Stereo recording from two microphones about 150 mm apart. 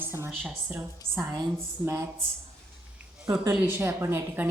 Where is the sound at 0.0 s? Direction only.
15° right (ahead or behind).